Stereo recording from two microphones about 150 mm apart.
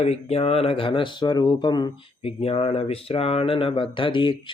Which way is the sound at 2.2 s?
40° left (ahead or behind).